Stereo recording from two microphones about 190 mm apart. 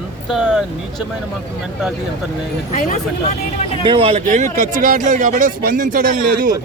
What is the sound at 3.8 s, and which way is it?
Speech, 30° right (ahead or behind).